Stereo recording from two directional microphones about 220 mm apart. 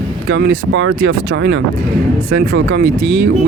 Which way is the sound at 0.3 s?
55° right (ahead or behind).